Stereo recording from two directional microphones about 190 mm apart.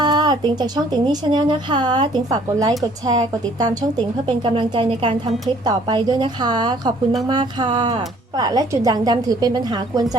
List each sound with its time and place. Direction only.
0.0 s speech: 20° right (ahead or behind)